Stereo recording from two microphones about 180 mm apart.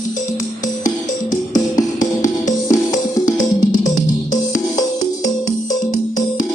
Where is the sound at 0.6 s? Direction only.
45° left (ahead or behind).